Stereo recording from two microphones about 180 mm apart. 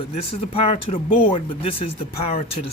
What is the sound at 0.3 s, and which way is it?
Speech, 35° left (ahead or behind).